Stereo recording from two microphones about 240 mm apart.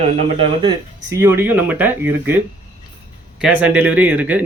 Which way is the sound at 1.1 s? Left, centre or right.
Centre.